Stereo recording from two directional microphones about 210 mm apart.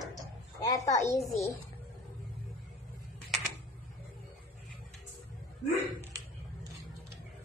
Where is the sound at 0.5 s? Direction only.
15° left (ahead or behind).